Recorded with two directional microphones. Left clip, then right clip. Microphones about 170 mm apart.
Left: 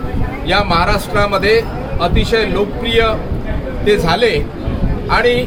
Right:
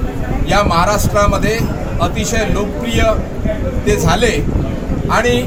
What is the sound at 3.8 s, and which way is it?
Speech, centre (ahead or behind).